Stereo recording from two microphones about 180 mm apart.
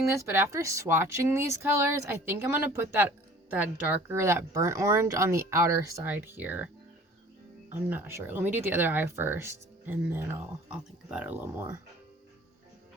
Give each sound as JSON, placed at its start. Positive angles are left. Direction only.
{"t": 0.1, "sound": "speech", "side_deg": -15}
{"t": 7.7, "sound": "speech", "side_deg": -10}